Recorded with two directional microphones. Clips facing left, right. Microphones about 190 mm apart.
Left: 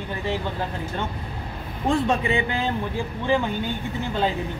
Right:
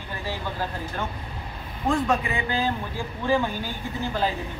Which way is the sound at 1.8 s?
30° left (ahead or behind).